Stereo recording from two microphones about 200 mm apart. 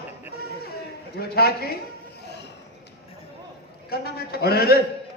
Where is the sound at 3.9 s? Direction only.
50° left (ahead or behind).